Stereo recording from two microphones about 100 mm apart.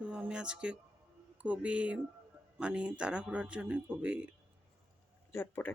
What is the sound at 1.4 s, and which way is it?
Speech, 15° right (ahead or behind).